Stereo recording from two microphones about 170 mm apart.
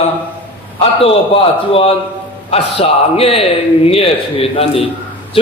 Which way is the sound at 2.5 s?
35° left (ahead or behind).